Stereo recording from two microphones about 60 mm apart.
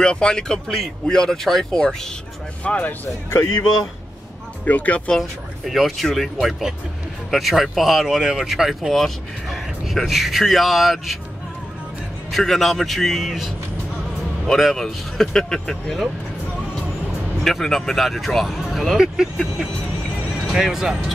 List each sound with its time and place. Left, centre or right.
0.0 s speech: centre
2.6 s speech: left
4.6 s speech: left
5.7 s speech: centre
12.3 s speech: centre
14.6 s speech: centre
17.4 s speech: centre